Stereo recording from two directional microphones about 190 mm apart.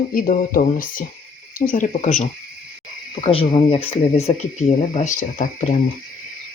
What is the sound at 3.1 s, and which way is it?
Speech, 25° left (ahead or behind).